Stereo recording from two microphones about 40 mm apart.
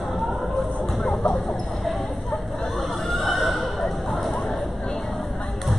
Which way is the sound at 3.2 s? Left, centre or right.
Centre.